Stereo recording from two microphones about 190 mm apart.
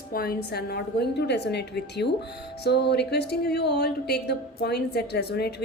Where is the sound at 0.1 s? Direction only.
50° left (ahead or behind).